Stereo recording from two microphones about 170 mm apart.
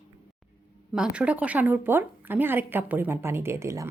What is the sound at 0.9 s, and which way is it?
Speech, 5° right (ahead or behind).